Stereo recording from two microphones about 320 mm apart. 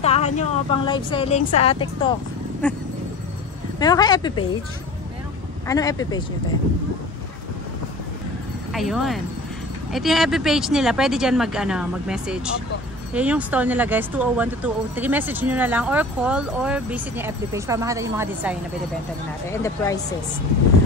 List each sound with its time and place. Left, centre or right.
0.0 s a woman's voice: centre
2.6 s speech: centre
3.8 s speech: centre
5.7 s speech: centre
8.7 s speech: centre
19.5 s speech: centre